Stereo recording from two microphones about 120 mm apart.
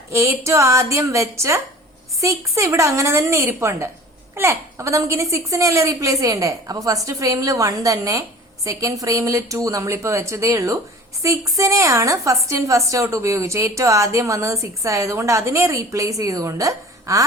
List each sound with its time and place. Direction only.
0.1 s a woman's voice: 25° right (ahead or behind)